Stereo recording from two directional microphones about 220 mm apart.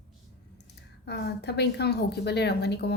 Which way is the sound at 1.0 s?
50° left (ahead or behind).